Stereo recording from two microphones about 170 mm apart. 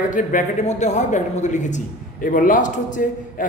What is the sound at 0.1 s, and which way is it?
A man's voice, 50° left (ahead or behind).